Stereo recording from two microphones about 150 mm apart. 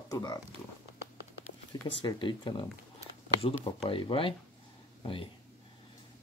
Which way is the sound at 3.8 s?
35° left (ahead or behind).